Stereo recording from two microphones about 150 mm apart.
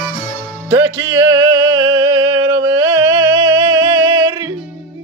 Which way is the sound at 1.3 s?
25° right (ahead or behind).